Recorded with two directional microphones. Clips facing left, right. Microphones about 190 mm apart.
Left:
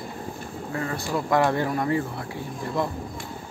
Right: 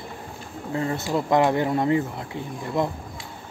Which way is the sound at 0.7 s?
25° right (ahead or behind).